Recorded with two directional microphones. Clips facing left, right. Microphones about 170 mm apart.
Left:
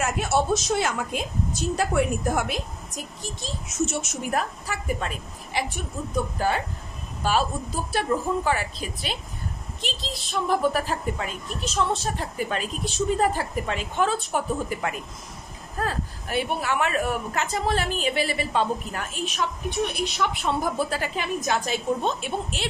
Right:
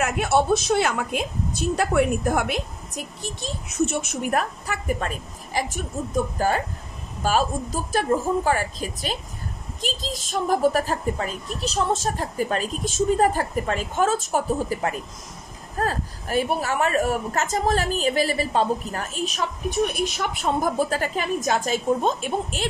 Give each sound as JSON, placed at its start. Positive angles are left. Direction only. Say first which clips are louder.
{"t": 0.0, "sound": "a woman's voice", "louder": "right 3 dB", "side_deg": -55}